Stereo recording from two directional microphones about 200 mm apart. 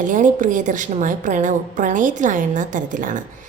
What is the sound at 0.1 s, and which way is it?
A woman's voice, 40° right (ahead or behind).